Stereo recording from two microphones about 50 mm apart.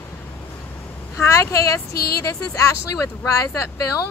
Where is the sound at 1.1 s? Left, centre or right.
Left.